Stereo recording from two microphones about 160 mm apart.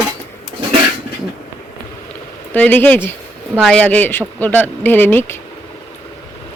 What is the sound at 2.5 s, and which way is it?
Speech, 10° left (ahead or behind).